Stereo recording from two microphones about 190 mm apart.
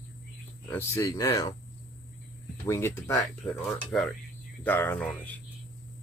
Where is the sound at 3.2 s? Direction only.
Centre (ahead or behind).